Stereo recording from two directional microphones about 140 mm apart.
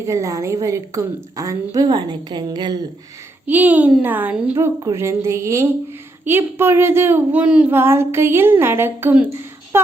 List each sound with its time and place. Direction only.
0.0 s a woman's voice: 20° right (ahead or behind)
3.4 s a woman's voice: 10° right (ahead or behind)
4.5 s a woman's voice: 20° right (ahead or behind)